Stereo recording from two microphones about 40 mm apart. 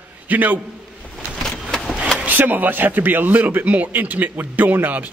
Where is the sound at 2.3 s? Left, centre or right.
Right.